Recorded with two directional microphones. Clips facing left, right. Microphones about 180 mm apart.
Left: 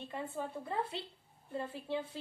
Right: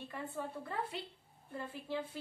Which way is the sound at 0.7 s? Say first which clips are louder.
Left 3 dB; 25° left (ahead or behind).